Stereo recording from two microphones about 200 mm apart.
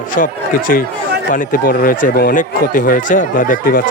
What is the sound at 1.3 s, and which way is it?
Speech, 45° left (ahead or behind).